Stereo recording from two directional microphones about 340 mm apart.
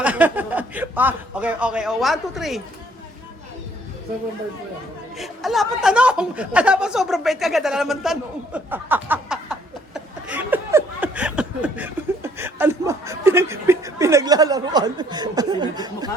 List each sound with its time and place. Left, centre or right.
0.0 s a man's voice: centre
5.1 s speech: centre